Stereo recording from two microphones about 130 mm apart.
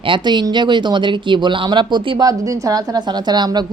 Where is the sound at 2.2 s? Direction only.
25° right (ahead or behind).